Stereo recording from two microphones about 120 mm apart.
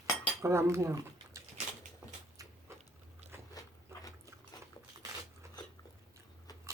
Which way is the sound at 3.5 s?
30° left (ahead or behind).